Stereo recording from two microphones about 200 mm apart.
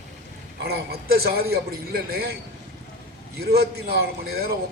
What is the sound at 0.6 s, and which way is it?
A man's voice, 50° right (ahead or behind).